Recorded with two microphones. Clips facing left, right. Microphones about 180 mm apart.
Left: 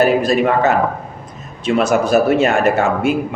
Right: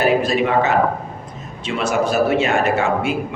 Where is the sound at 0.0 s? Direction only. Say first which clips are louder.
Left 3 dB; 40° left (ahead or behind).